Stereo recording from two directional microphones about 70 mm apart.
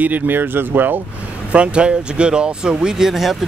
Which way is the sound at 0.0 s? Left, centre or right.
Right.